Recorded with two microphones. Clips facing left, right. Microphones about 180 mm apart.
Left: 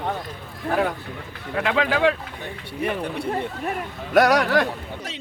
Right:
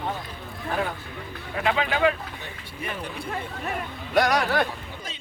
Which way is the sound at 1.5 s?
65° left (ahead or behind).